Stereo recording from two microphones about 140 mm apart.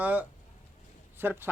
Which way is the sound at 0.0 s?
10° right (ahead or behind).